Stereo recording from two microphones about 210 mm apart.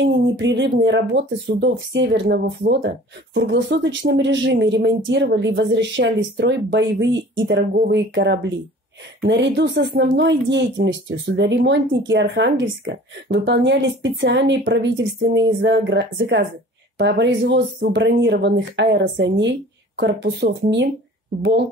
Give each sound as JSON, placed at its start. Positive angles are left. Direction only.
{"t": 0.0, "sound": "speech", "side_deg": -60}